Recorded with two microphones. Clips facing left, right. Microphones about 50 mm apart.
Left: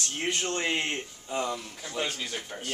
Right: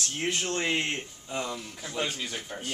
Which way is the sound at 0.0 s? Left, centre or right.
Centre.